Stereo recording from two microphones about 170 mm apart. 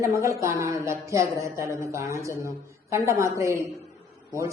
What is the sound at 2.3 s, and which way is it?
Speech, 15° left (ahead or behind).